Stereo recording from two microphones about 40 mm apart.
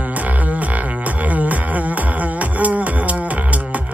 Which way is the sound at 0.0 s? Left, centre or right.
Right.